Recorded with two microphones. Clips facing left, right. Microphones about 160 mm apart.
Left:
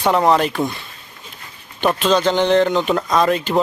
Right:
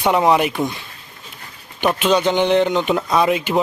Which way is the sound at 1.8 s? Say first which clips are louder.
Even; 15° right (ahead or behind).